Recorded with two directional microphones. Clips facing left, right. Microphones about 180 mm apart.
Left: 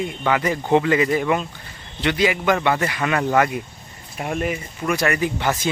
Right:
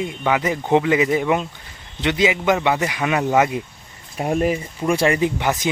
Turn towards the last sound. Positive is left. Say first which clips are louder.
# right 2 dB
turn(degrees=-15)  # may be behind; listen again after turning